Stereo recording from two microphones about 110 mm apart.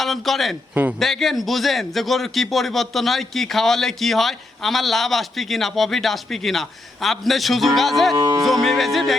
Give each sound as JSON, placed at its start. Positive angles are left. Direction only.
{"t": 0.0, "sound": "a man's voice", "side_deg": 0}
{"t": 0.7, "sound": "a man's voice", "side_deg": -15}
{"t": 0.9, "sound": "a man's voice", "side_deg": 0}
{"t": 8.1, "sound": "speech", "side_deg": -35}
{"t": 8.4, "sound": "a man's voice", "side_deg": 0}